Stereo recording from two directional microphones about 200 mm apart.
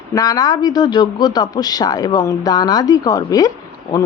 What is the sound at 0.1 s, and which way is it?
Speech, 20° left (ahead or behind).